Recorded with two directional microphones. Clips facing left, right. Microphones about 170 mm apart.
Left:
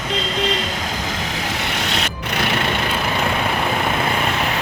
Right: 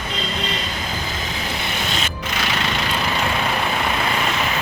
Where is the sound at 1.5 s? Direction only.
75° left (ahead or behind); by 2.7 s 55° left (ahead or behind).